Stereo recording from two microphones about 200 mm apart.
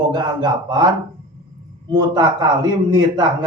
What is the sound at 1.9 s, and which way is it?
A man's voice, 20° right (ahead or behind).